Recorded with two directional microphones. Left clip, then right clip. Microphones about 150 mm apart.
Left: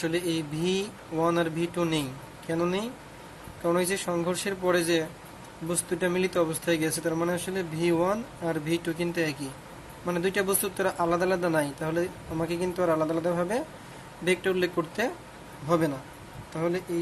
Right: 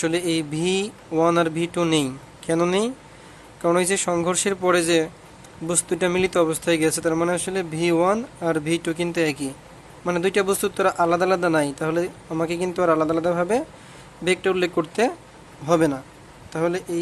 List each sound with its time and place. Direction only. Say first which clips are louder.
0.0 s speech: right 6 dB; 55° right (ahead or behind)
15.6 s speech: right 7 dB; 65° right (ahead or behind)